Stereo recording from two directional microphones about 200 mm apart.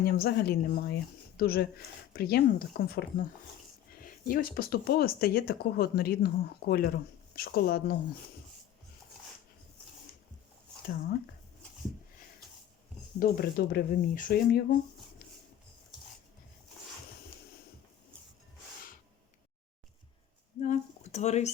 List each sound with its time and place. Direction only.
0.0 s speech: 50° left (ahead or behind)
13.1 s speech: 50° left (ahead or behind)
20.6 s speech: 35° left (ahead or behind)